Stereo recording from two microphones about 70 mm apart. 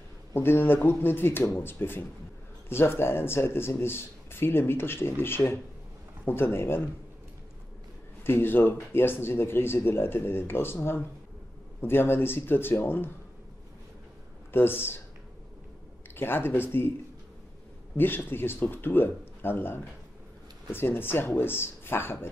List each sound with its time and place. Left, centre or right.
0.3 s speech: left
8.2 s speech: left
14.5 s speech: left
16.2 s speech: left
17.9 s speech: left